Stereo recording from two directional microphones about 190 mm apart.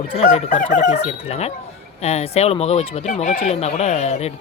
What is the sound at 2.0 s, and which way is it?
Speech, 35° left (ahead or behind).